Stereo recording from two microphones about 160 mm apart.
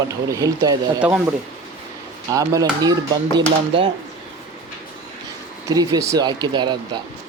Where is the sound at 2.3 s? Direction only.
20° right (ahead or behind).